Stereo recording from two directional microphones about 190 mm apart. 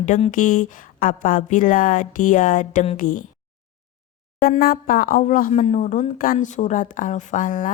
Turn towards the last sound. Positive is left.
turn(degrees=45)  # may be behind; listen again after turning